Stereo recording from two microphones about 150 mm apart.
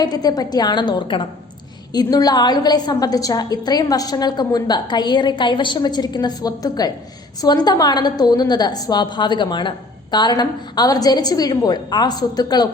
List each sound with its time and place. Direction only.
0.0 s a woman's voice: 25° left (ahead or behind)